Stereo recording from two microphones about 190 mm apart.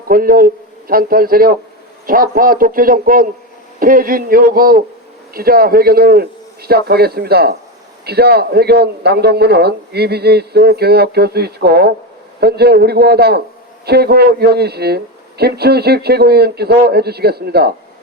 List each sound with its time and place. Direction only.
0.1 s a man's voice: 50° right (ahead or behind)